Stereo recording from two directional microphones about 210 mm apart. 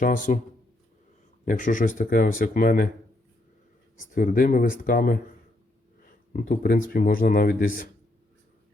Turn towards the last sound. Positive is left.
turn(degrees=40)  # may be behind; listen again after turning